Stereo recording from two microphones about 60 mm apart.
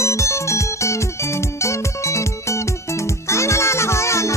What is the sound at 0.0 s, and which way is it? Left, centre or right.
Music, left.